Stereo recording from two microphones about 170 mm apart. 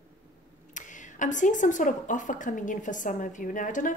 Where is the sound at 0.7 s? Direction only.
45° left (ahead or behind).